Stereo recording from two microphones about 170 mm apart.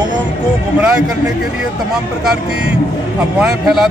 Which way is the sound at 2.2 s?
5° right (ahead or behind).